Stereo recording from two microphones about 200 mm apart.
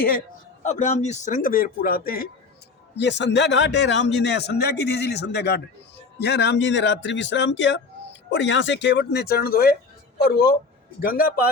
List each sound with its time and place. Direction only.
0.6 s speech: 35° left (ahead or behind)
2.9 s a man's voice: 60° left (ahead or behind)